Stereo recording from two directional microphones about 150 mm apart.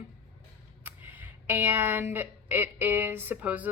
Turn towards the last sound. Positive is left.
turn(degrees=-10)  # may be behind; listen again after turning